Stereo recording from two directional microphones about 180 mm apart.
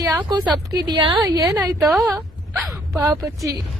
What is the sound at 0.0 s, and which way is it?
Speech, 20° right (ahead or behind).